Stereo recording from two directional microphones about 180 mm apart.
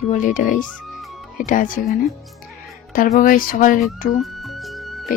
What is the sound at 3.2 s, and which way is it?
Speech, 50° left (ahead or behind).